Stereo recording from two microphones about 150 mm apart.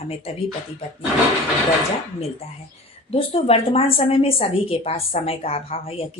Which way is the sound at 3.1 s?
40° left (ahead or behind).